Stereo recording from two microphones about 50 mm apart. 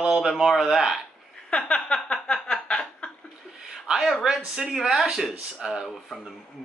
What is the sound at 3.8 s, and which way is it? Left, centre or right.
A woman's voice, centre.